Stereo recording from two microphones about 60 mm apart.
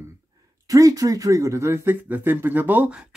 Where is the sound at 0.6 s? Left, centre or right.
Right.